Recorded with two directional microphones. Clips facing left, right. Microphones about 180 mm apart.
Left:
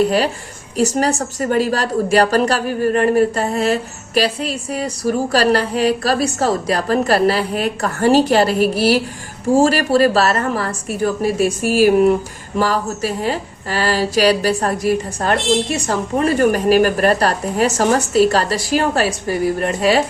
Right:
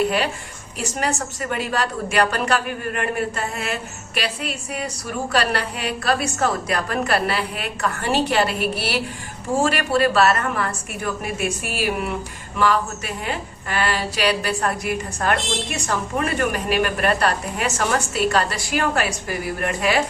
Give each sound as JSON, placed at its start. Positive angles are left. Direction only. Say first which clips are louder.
{"t": 0.8, "sound": "a woman's voice", "louder": "left 8 dB", "side_deg": 40}